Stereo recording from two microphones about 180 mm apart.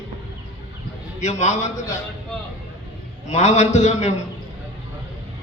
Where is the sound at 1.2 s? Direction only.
40° left (ahead or behind).